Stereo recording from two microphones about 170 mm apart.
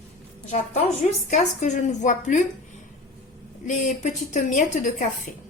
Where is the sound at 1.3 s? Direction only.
45° left (ahead or behind).